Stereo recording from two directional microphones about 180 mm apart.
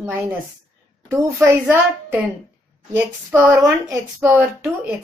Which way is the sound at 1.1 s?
15° right (ahead or behind).